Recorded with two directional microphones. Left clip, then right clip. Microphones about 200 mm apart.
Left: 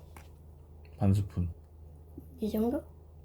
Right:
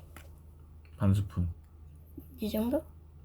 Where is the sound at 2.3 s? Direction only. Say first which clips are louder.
Left 1 dB; 50° right (ahead or behind).